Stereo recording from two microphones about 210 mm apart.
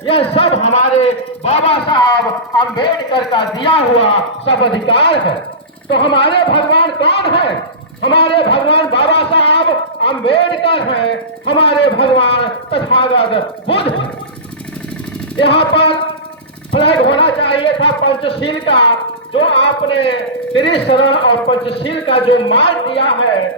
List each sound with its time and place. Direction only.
0.0 s speech: 25° left (ahead or behind)
15.4 s speech: 25° left (ahead or behind)